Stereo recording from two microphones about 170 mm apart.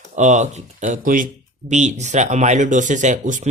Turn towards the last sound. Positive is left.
turn(degrees=-45)  # may be behind; listen again after turning